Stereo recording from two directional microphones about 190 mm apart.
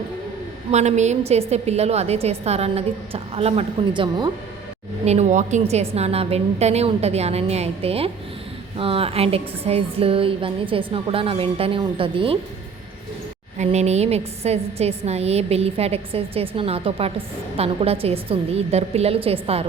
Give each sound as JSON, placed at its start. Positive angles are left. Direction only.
{"t": 0.7, "sound": "a woman's voice", "side_deg": -35}
{"t": 5.0, "sound": "a woman's voice", "side_deg": -35}
{"t": 13.6, "sound": "a woman's voice", "side_deg": -35}